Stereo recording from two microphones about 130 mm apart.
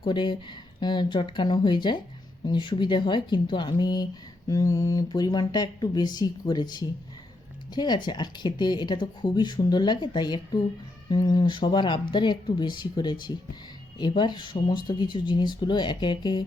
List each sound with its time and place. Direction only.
0.0 s speech: 35° left (ahead or behind)